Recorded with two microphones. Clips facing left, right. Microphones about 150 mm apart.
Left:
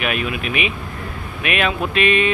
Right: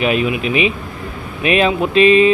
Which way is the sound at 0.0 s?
25° right (ahead or behind).